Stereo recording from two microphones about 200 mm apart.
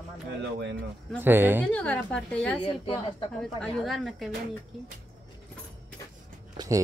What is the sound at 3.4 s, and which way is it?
Speech, centre (ahead or behind).